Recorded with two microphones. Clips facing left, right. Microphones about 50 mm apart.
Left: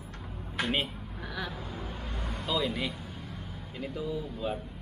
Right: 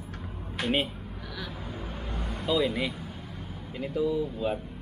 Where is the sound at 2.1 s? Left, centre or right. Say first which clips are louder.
Right 4 dB; centre.